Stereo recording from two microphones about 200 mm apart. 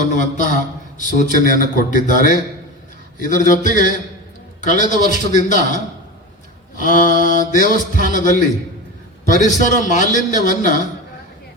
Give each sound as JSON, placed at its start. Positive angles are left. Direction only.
{"t": 0.1, "sound": "speech", "side_deg": 40}